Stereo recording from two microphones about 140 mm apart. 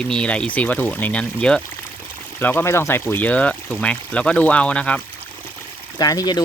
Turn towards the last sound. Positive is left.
turn(degrees=30)  # may be behind; listen again after turning